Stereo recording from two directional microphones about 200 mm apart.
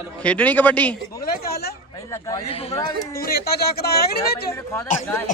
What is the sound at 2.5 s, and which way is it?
Speech, 30° left (ahead or behind).